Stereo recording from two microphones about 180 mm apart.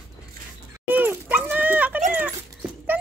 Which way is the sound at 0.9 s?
10° right (ahead or behind).